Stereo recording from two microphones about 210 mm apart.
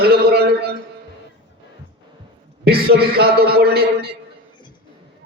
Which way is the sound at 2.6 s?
50° right (ahead or behind).